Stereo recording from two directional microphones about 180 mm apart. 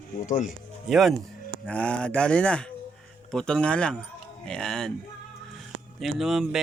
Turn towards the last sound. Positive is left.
turn(degrees=0)  # may be behind; listen again after turning